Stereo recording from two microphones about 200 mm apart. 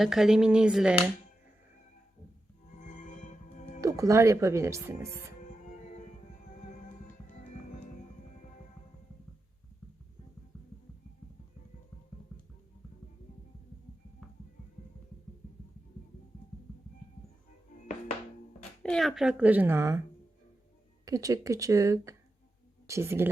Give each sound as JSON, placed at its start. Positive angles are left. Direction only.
{"t": 0.0, "sound": "speech", "side_deg": 0}
{"t": 2.7, "sound": "music", "side_deg": 40}
{"t": 3.8, "sound": "speech", "side_deg": -15}
{"t": 5.4, "sound": "music", "side_deg": 40}
{"t": 18.8, "sound": "speech", "side_deg": 5}